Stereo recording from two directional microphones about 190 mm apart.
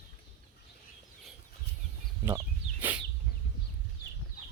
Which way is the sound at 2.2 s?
10° right (ahead or behind).